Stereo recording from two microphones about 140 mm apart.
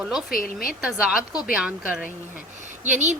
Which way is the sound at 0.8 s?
5° right (ahead or behind).